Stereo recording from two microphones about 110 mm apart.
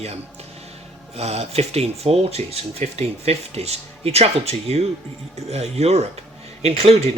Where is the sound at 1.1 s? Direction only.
75° right (ahead or behind).